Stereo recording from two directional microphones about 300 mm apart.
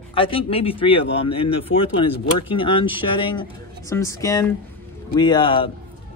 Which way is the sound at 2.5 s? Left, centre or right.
Centre.